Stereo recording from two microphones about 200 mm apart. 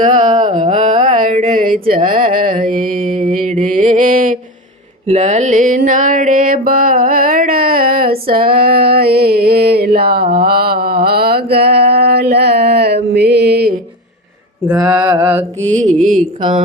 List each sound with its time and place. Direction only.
0.0 s a sound: 40° right (ahead or behind)
0.7 s carnatic music: 40° right (ahead or behind)
1.0 s a sound: 40° right (ahead or behind)
5.0 s music: 35° right (ahead or behind)
10.2 s mantra: 50° right (ahead or behind)
14.7 s mantra: 5° right (ahead or behind)
14.9 s mantra: 20° right (ahead or behind)
15.2 s mantra: 10° right (ahead or behind)
15.7 s a sound: 35° right (ahead or behind)